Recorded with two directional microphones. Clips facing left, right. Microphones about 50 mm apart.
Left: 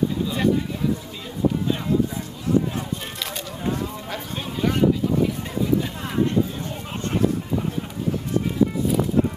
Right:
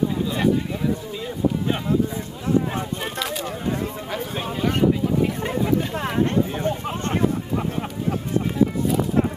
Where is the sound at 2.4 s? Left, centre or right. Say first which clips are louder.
Even; right.